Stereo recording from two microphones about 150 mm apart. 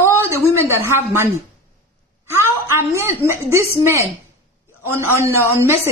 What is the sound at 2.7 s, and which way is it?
A woman's voice, 20° right (ahead or behind).